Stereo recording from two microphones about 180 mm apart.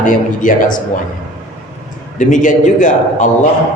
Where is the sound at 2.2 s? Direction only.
45° left (ahead or behind).